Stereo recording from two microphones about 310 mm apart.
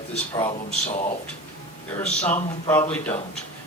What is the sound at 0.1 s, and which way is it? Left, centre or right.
Speech, centre.